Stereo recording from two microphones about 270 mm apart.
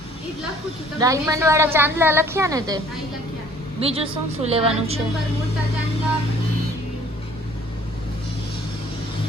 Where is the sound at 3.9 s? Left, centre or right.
Right.